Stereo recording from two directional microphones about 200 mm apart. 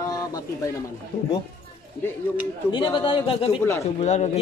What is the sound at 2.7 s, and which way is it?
A man's voice, 25° left (ahead or behind).